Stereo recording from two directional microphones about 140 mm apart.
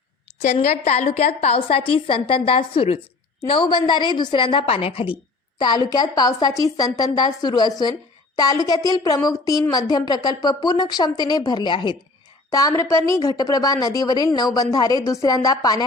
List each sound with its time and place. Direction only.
0.4 s a woman's voice: 55° left (ahead or behind)
5.5 s a woman's voice: 30° left (ahead or behind)